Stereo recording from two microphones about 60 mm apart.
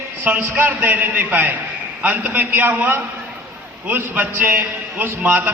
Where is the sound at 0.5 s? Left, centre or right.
Right.